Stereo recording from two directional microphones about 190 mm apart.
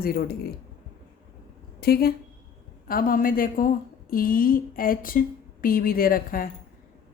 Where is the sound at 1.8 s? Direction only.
50° left (ahead or behind).